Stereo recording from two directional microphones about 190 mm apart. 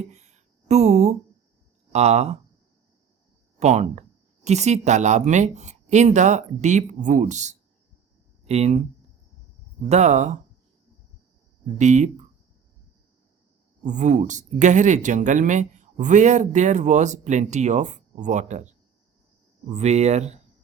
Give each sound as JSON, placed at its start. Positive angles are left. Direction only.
{"t": 0.0, "sound": "speech", "side_deg": -35}
{"t": 3.6, "sound": "speech", "side_deg": -35}
{"t": 9.9, "sound": "speech", "side_deg": -40}
{"t": 11.8, "sound": "speech", "side_deg": -40}
{"t": 13.8, "sound": "speech", "side_deg": -40}
{"t": 19.7, "sound": "speech", "side_deg": -35}